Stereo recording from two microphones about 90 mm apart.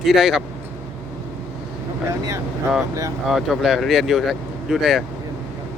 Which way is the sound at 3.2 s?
5° right (ahead or behind).